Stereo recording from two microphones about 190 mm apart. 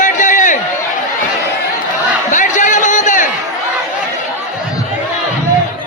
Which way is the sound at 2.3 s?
40° left (ahead or behind).